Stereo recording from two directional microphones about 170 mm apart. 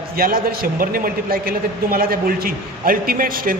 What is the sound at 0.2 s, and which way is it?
A man's voice, 60° right (ahead or behind).